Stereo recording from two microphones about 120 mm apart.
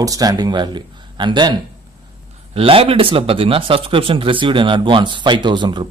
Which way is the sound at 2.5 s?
50° right (ahead or behind).